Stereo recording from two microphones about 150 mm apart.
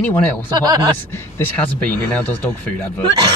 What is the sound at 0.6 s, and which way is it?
Speech, 25° right (ahead or behind).